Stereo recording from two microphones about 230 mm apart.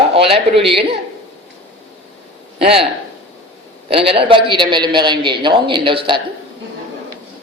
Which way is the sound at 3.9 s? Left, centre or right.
Right.